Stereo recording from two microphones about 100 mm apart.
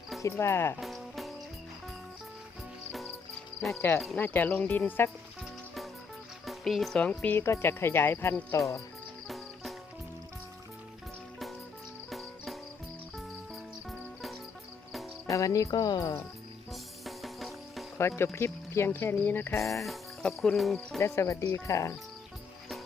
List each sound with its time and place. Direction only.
0.2 s speech: 30° left (ahead or behind)
0.8 s music: centre (ahead or behind)
3.8 s speech: 25° left (ahead or behind)
6.4 s music: centre (ahead or behind)
7.0 s speech: 15° left (ahead or behind)
7.3 s speech: 25° left (ahead or behind)
9.2 s music: centre (ahead or behind)
15.3 s speech: 35° left (ahead or behind)
16.7 s music: centre (ahead or behind)
18.0 s speech: 25° left (ahead or behind)
19.8 s speech: centre (ahead or behind)
21.0 s speech: 30° left (ahead or behind)